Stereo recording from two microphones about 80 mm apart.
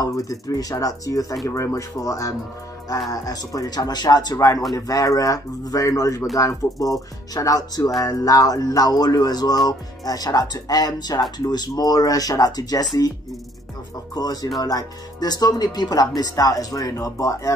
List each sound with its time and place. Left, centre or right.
0.0 s speech: left
14.1 s speech: left